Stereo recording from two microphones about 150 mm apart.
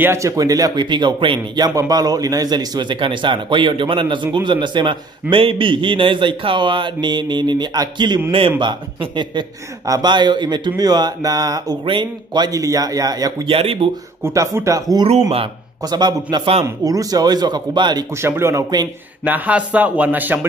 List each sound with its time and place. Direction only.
0.0 s speech: 20° right (ahead or behind)
13.6 s speech: 40° right (ahead or behind)
14.2 s speech: 20° right (ahead or behind)
18.1 s speech: 15° right (ahead or behind)
19.2 s speech: 10° right (ahead or behind)